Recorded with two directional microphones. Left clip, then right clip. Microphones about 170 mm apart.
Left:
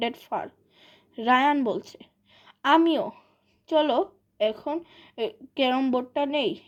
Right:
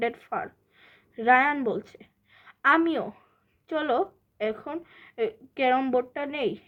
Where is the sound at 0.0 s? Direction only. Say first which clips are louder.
Even; 30° left (ahead or behind).